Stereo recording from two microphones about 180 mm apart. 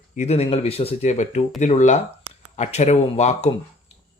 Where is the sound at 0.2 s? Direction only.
35° left (ahead or behind).